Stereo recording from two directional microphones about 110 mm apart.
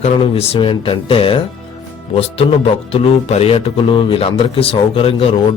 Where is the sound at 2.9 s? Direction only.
65° left (ahead or behind).